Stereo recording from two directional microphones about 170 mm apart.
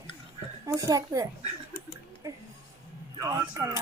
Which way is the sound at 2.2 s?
20° right (ahead or behind).